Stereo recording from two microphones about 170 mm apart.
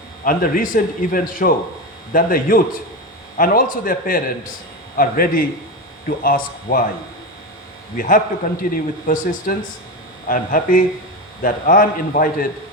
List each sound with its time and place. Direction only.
0.3 s speech: 55° left (ahead or behind)
7.9 s a man's voice: 50° left (ahead or behind)